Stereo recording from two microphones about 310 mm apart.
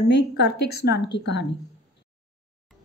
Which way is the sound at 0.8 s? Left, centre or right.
Left.